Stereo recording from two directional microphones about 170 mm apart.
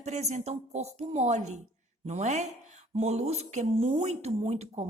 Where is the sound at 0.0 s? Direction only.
40° right (ahead or behind).